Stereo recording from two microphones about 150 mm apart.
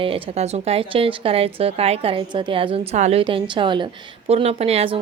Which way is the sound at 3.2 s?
35° right (ahead or behind).